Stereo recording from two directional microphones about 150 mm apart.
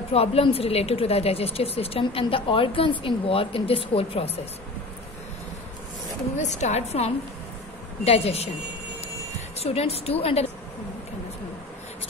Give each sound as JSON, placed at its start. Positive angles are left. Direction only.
{"t": 0.1, "sound": "a woman's voice", "side_deg": 40}
{"t": 6.3, "sound": "a woman's voice", "side_deg": 50}
{"t": 9.6, "sound": "a woman's voice", "side_deg": 40}